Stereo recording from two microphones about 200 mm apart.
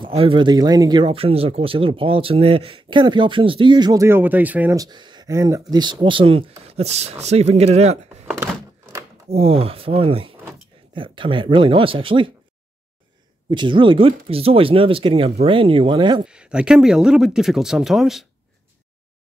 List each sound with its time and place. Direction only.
0.0 s speech: 25° right (ahead or behind)
9.3 s speech: 30° right (ahead or behind)
13.5 s speech: 25° right (ahead or behind)
16.3 s speech: 5° right (ahead or behind)